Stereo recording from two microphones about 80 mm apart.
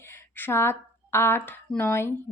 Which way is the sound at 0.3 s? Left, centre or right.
Left.